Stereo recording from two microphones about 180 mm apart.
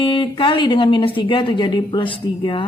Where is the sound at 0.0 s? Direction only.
25° left (ahead or behind).